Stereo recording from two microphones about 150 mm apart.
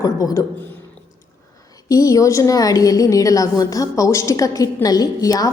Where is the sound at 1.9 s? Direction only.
25° left (ahead or behind).